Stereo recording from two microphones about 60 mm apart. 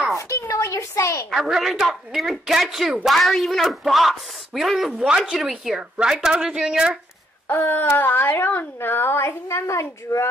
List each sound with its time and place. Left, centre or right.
0.5 s a sound: left
1.3 s speech: centre
4.9 s speech: centre
7.5 s a woman's voice: left